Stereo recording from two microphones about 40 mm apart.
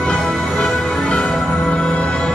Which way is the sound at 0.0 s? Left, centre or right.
Centre.